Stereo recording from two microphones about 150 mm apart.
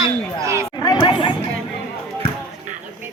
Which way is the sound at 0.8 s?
25° left (ahead or behind).